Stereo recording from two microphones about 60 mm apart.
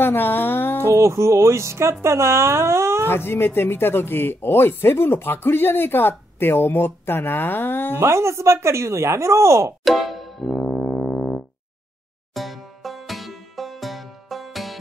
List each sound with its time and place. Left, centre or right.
0.0 s music: left
0.8 s speech: right
3.1 s speech: left
8.0 s speech: right
9.8 s music: centre
10.5 s music: centre
12.4 s music: centre